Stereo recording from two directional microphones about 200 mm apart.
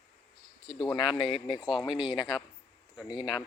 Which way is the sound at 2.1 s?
20° left (ahead or behind).